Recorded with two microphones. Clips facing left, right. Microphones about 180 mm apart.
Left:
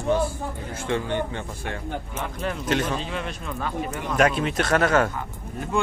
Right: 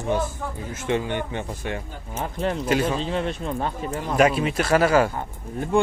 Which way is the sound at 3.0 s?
25° right (ahead or behind).